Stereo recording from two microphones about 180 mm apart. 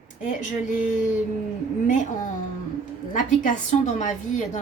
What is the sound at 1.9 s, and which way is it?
A woman's voice, 45° left (ahead or behind).